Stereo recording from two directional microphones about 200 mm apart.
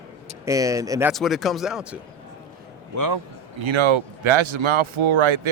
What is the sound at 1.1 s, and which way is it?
Speech, centre (ahead or behind).